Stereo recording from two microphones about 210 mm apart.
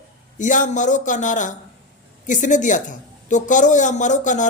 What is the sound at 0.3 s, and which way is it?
A woman's voice, 35° left (ahead or behind).